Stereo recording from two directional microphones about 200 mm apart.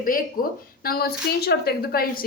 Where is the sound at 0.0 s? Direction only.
45° left (ahead or behind).